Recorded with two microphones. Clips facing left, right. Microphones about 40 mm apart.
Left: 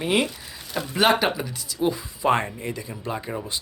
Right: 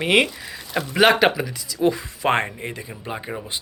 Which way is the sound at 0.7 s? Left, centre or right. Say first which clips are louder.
Right 4 dB; right.